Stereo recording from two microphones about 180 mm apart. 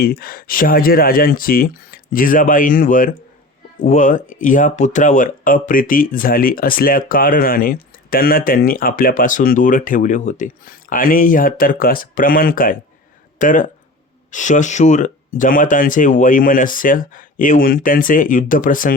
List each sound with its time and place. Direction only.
0.0 s speech: 60° left (ahead or behind)